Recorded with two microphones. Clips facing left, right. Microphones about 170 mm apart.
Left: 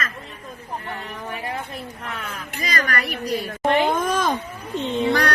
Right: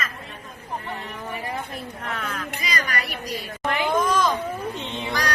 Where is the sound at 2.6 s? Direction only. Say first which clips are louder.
Left 5 dB; 45° left (ahead or behind).